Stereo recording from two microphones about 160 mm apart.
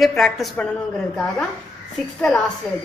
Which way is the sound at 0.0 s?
Centre (ahead or behind).